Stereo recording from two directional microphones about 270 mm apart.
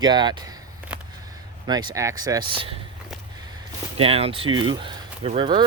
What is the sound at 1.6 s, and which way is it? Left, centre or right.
Speech, centre.